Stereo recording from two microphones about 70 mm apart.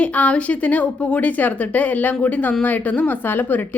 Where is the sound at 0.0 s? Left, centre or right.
Centre.